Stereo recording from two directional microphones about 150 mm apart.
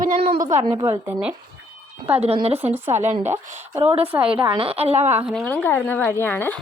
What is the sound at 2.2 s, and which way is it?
Speech, 40° right (ahead or behind).